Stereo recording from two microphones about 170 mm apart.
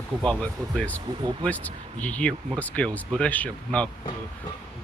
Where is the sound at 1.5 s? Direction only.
10° left (ahead or behind).